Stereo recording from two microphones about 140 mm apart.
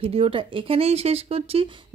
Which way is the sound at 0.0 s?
45° right (ahead or behind).